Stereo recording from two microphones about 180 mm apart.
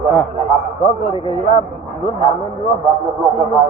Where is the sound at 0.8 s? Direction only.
35° left (ahead or behind).